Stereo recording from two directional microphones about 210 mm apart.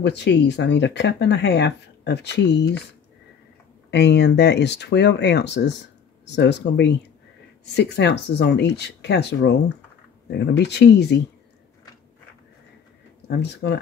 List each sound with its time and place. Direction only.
0.0 s speech: 55° left (ahead or behind)
3.9 s speech: 55° left (ahead or behind)
13.3 s speech: 55° left (ahead or behind)